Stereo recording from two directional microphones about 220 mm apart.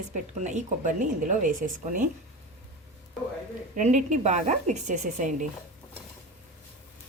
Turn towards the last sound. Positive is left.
turn(degrees=-35)  # may be behind; listen again after turning